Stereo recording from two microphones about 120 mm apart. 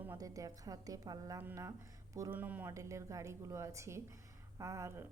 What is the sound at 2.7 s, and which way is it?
A woman's voice, 25° right (ahead or behind).